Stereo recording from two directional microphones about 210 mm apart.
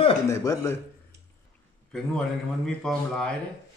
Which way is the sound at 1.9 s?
5° left (ahead or behind).